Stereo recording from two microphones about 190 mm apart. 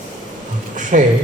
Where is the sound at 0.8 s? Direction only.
40° right (ahead or behind).